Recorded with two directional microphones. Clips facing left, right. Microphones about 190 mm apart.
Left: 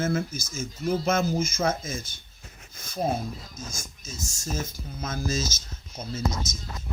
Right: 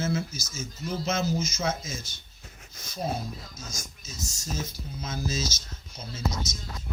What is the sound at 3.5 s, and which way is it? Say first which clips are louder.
Speech: left 2 dB; 50° left (ahead or behind).